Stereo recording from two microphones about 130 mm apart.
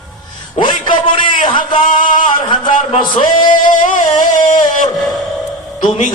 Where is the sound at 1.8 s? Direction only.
90° left.